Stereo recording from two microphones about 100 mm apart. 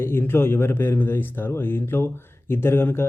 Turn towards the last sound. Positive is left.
turn(degrees=25)  # may be behind; listen again after turning